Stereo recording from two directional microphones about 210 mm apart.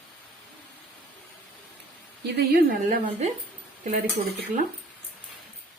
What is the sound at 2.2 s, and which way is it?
A woman's voice, 45° right (ahead or behind).